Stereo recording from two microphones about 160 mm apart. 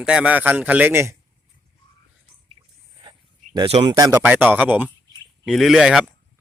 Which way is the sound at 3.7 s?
40° right (ahead or behind).